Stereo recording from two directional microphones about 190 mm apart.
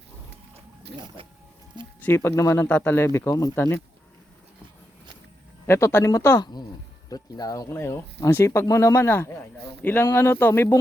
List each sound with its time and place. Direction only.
1.2 s speech: 30° right (ahead or behind)
2.0 s speech: 10° left (ahead or behind)
5.6 s speech: 15° left (ahead or behind)